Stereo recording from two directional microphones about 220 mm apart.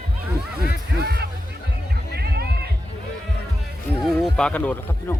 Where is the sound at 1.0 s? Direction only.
45° right (ahead or behind).